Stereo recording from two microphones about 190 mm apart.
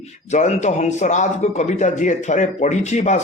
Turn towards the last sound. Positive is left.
turn(degrees=40)  # may be behind; listen again after turning